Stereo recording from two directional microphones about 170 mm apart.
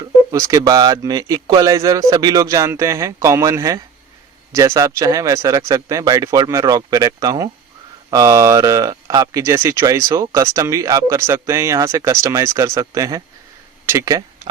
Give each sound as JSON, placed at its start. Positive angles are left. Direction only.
{"t": 0.3, "sound": "speech", "side_deg": -20}